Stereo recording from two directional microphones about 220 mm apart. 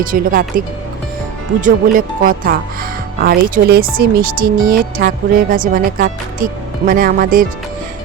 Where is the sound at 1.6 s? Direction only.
40° right (ahead or behind).